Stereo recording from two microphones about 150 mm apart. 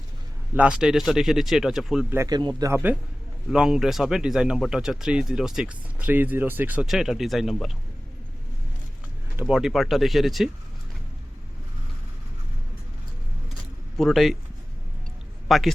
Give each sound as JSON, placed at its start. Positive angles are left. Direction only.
{"t": 0.5, "sound": "speech", "side_deg": -5}
{"t": 2.0, "sound": "speech", "side_deg": -20}
{"t": 9.3, "sound": "speech", "side_deg": -10}
{"t": 13.9, "sound": "speech", "side_deg": 0}
{"t": 15.4, "sound": "a man's voice", "side_deg": 0}